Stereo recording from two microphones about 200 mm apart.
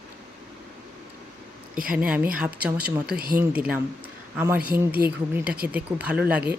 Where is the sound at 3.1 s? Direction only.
50° right (ahead or behind).